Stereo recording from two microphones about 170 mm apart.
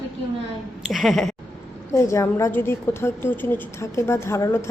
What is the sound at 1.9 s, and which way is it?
A woman's voice, 15° left (ahead or behind).